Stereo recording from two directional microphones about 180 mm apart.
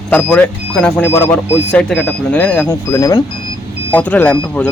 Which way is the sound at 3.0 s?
20° left (ahead or behind).